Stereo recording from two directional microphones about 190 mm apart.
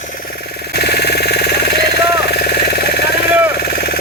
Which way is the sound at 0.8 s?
60° left (ahead or behind).